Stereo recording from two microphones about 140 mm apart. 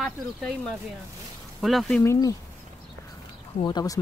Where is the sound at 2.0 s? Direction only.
20° left (ahead or behind).